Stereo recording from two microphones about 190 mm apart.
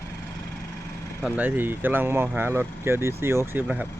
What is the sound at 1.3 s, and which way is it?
Speech, 10° right (ahead or behind).